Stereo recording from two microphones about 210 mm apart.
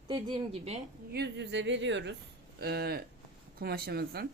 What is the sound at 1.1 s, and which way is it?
Speech, 55° right (ahead or behind).